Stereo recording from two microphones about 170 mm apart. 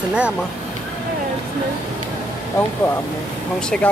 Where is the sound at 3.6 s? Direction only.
5° left (ahead or behind).